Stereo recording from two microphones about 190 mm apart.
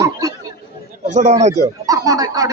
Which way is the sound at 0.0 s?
20° right (ahead or behind).